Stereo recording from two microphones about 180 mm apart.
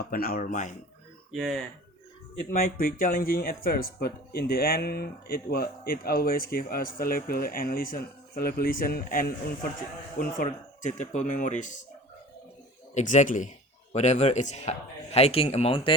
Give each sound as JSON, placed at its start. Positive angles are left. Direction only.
{"t": 0.0, "sound": "speech", "side_deg": 55}
{"t": 1.3, "sound": "speech", "side_deg": 0}
{"t": 2.5, "sound": "speech", "side_deg": 55}
{"t": 12.9, "sound": "speech", "side_deg": 40}